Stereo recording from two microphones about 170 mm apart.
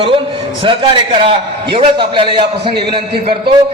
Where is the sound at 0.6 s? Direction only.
30° right (ahead or behind).